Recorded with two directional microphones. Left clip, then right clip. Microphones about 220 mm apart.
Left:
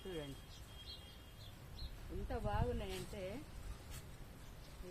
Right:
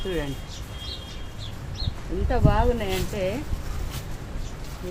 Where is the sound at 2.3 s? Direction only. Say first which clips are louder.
Right 19 dB; 25° left (ahead or behind).